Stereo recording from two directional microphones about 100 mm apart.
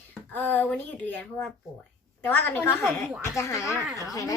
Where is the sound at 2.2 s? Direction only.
20° left (ahead or behind).